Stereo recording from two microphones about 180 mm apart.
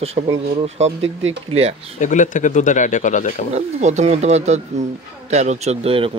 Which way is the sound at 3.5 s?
40° right (ahead or behind).